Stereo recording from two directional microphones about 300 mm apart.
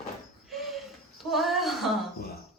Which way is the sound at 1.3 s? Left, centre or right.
Centre.